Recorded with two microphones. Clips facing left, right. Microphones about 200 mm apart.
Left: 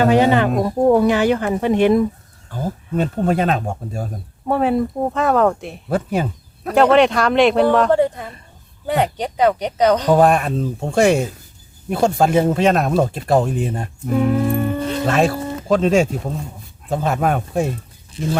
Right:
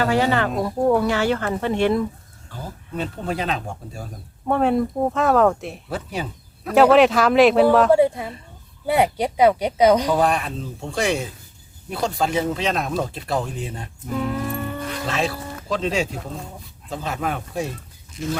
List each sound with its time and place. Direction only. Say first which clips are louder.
0.0 s speech: left 6 dB; 20° left (ahead or behind)
2.5 s speech: left 9 dB; 45° left (ahead or behind)
4.4 s speech: left 2 dB; 5° left (ahead or behind)
5.9 s speech: left 9 dB; 50° left (ahead or behind)
6.7 s speech: even; centre (ahead or behind)
10.1 s speech: left 6 dB; 50° left (ahead or behind)
14.3 s music: left 8 dB; 25° left (ahead or behind)
15.0 s speech: left 8 dB; 50° left (ahead or behind)
18.2 s speech: left 4 dB; 30° left (ahead or behind)